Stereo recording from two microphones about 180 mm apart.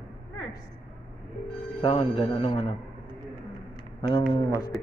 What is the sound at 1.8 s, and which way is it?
Speech, 35° left (ahead or behind).